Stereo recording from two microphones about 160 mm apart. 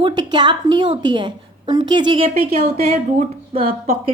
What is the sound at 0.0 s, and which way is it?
Speech, 25° right (ahead or behind).